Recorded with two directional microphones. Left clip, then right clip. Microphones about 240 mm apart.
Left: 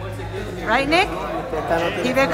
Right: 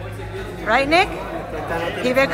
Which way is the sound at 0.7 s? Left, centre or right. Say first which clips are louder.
Right 2 dB; centre.